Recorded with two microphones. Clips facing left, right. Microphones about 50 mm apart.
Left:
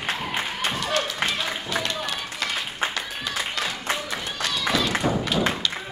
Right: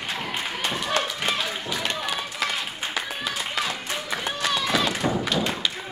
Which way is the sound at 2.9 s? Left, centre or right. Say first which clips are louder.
Right 1 dB; centre.